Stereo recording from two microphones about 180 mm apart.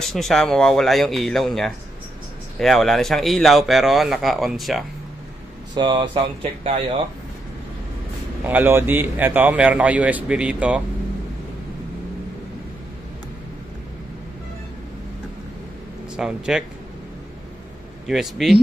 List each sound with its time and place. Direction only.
0.0 s speech: centre (ahead or behind)
5.8 s speech: 25° right (ahead or behind)
8.5 s a man's voice: 10° right (ahead or behind)
16.2 s speech: 5° right (ahead or behind)
18.0 s speech: centre (ahead or behind)